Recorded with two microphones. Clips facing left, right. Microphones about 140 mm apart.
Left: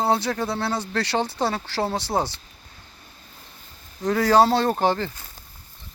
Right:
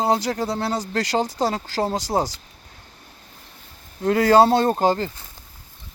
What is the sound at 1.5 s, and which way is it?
Speech, 15° right (ahead or behind).